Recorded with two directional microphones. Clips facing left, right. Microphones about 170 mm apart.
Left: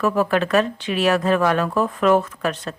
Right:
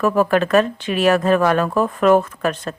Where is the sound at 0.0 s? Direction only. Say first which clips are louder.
Right 3 dB; 45° right (ahead or behind).